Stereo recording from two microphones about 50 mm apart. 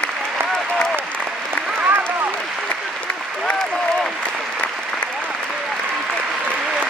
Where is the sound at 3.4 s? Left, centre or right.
Centre.